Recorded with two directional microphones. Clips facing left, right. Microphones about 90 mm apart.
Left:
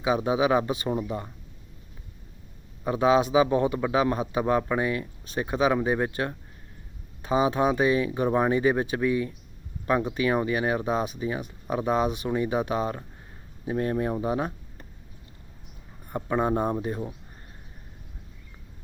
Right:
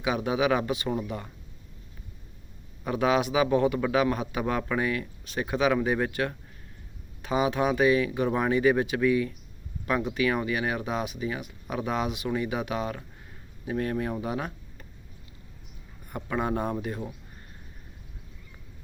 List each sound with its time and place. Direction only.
0.0 s a man's voice: 30° left (ahead or behind)
2.8 s a man's voice: 30° left (ahead or behind)
16.0 s a man's voice: 30° left (ahead or behind)